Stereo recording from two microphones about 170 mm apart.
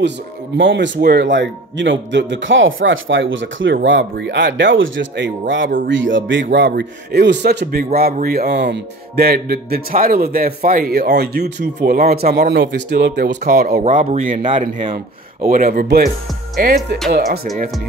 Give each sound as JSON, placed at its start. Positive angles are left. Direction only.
{"t": 0.6, "sound": "speech", "side_deg": -90}
{"t": 5.5, "sound": "speech", "side_deg": -75}
{"t": 6.5, "sound": "speech", "side_deg": -75}
{"t": 13.8, "sound": "speech", "side_deg": -45}
{"t": 15.5, "sound": "speech", "side_deg": -55}